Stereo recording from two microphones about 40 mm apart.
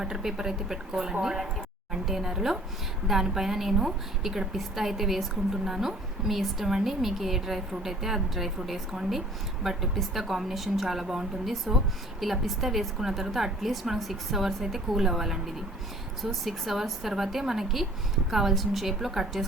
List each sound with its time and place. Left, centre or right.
0.0 s a woman's voice: centre
16.2 s a woman's voice: centre